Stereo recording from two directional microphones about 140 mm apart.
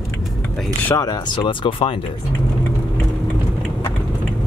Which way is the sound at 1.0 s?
30° left (ahead or behind).